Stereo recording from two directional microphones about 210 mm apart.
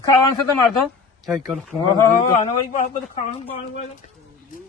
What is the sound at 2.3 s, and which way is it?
A man's voice, 35° left (ahead or behind).